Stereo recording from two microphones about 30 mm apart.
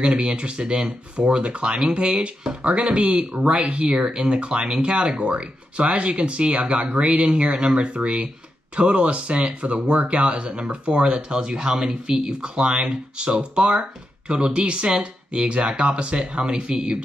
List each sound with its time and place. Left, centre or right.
0.0 s speech: right
3.9 s speech: right